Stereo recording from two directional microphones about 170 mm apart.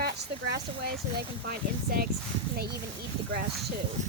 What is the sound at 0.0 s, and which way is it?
Speech, 65° right (ahead or behind).